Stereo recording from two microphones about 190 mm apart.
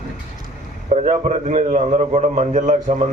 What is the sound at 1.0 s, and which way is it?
A man's voice, 40° right (ahead or behind).